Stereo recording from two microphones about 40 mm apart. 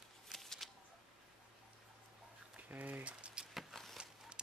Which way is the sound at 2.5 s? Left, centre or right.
Right.